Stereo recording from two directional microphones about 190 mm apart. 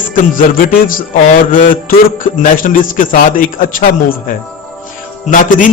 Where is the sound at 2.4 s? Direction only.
45° left (ahead or behind).